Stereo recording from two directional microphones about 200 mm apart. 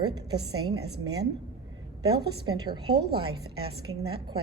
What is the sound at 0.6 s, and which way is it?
Speech, 20° right (ahead or behind).